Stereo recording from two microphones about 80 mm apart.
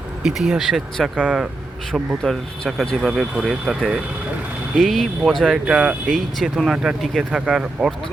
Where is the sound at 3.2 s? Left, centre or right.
Centre.